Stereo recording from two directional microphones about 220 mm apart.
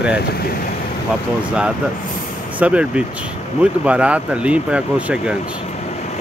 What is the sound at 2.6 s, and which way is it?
Speech, 5° right (ahead or behind).